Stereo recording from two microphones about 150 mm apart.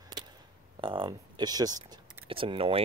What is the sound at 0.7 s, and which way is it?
Speech, 35° right (ahead or behind).